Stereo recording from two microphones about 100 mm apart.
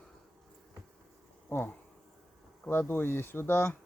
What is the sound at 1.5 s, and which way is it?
Speech, 25° left (ahead or behind).